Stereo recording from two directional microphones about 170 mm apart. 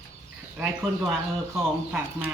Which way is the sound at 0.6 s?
10° right (ahead or behind).